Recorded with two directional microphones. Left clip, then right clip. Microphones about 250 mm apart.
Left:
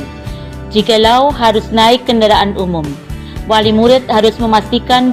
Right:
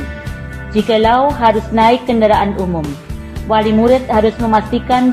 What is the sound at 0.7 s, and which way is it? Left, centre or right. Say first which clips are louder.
Speech: left 3 dB; left.